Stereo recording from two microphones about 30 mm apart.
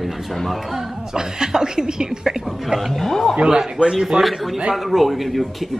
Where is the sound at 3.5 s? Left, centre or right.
Right.